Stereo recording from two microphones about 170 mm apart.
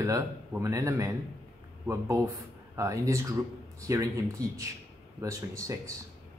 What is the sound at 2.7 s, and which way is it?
Speech, 20° right (ahead or behind).